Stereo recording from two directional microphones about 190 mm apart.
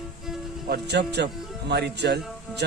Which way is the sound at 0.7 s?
60° right (ahead or behind).